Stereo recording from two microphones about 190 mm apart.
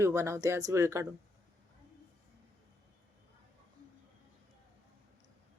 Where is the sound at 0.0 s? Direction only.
15° right (ahead or behind).